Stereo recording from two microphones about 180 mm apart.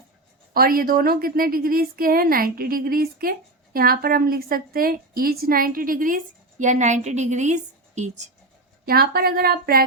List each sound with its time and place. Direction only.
0.5 s a woman's voice: 55° right (ahead or behind)
8.9 s speech: 55° right (ahead or behind)